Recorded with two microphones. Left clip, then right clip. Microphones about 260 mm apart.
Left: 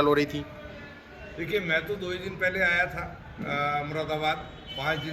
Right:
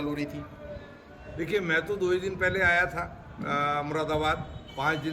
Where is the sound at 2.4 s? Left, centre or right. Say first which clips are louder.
Even; centre.